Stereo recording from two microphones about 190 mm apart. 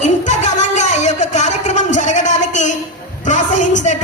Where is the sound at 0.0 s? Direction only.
40° left (ahead or behind).